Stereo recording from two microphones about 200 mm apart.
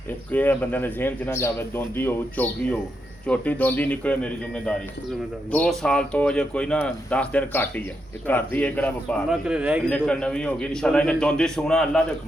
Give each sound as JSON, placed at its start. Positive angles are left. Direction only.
{"t": 0.3, "sound": "speech", "side_deg": 10}
{"t": 9.3, "sound": "speech", "side_deg": -5}
{"t": 9.9, "sound": "speech", "side_deg": 5}